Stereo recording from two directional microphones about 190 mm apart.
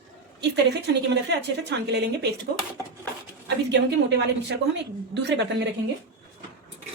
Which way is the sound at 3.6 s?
65° right (ahead or behind).